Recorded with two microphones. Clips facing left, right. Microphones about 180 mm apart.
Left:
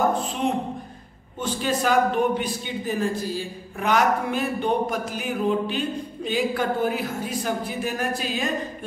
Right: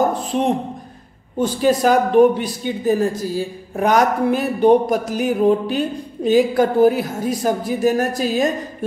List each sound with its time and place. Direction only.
1.4 s a man's voice: 40° right (ahead or behind)